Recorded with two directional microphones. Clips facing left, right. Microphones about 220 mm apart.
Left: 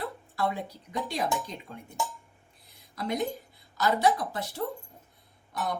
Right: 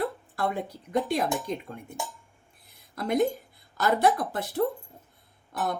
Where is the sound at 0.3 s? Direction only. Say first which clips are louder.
Even; 50° right (ahead or behind).